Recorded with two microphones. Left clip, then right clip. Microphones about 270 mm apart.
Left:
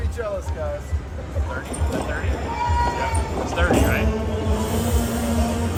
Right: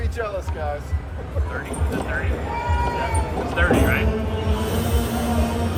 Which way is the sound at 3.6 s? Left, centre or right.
Centre.